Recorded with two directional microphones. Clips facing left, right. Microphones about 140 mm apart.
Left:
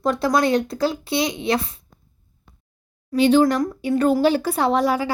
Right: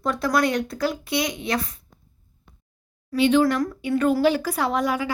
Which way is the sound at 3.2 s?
35° left (ahead or behind).